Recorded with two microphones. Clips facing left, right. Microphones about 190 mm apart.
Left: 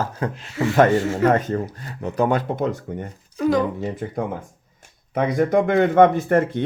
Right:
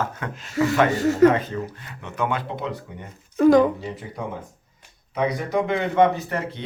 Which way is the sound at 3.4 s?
50° right (ahead or behind).